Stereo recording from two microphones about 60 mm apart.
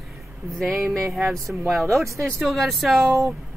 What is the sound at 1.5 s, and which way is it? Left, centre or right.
Speech, right.